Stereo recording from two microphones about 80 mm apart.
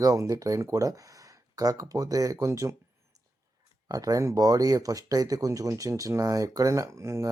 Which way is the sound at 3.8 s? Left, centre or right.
Right.